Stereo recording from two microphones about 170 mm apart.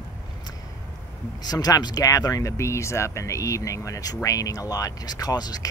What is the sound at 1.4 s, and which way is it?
Speech, 20° left (ahead or behind).